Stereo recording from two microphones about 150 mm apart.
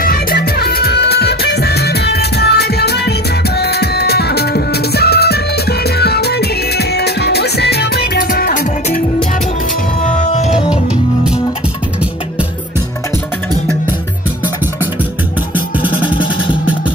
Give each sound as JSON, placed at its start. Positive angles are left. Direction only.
{"t": 0.0, "sound": "music", "side_deg": 80}
{"t": 10.0, "sound": "music", "side_deg": 50}